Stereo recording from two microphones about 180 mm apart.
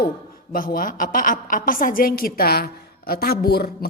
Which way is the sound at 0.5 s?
50° left (ahead or behind).